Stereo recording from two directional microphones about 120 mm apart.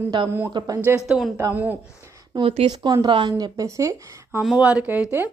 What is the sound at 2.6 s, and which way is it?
Speech, 35° right (ahead or behind).